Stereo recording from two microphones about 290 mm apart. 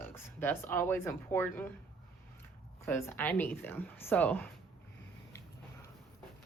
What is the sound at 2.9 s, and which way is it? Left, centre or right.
Speech, centre.